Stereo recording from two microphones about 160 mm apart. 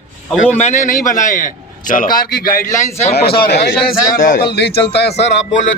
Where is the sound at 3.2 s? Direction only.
80° left.